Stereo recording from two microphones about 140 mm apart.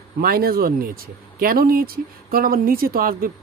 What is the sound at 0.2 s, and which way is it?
Speech, 90° right.